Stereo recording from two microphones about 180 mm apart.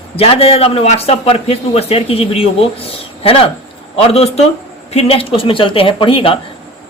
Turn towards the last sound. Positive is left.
turn(degrees=30)  # may be behind; listen again after turning